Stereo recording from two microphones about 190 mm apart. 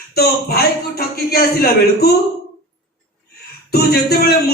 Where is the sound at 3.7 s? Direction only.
55° left (ahead or behind).